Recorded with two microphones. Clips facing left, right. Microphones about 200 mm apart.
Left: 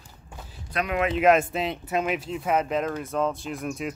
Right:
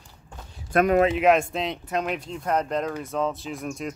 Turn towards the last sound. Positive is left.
turn(degrees=0)  # may be behind; listen again after turning